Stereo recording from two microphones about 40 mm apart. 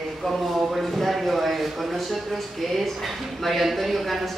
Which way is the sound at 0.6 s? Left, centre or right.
Centre.